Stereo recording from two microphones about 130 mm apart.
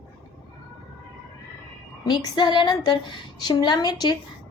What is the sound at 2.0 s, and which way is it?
A woman's voice, 35° left (ahead or behind).